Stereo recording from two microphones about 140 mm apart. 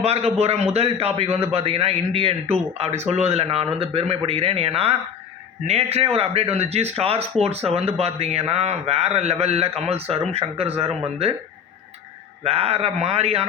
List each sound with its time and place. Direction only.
0.0 s speech: 50° right (ahead or behind)
12.5 s speech: 45° right (ahead or behind)